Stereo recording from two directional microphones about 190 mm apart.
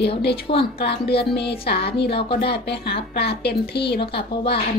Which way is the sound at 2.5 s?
60° left (ahead or behind).